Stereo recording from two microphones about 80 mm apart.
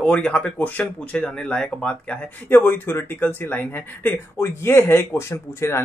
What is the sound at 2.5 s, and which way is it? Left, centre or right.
Speech, left.